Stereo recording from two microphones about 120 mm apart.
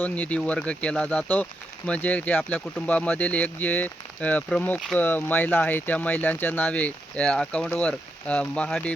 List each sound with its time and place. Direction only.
0.0 s speech: 10° left (ahead or behind)